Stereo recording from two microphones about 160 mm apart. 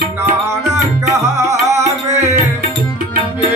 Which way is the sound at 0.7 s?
20° right (ahead or behind).